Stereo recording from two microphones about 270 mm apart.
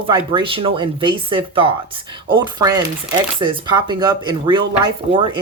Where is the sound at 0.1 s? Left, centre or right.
Centre.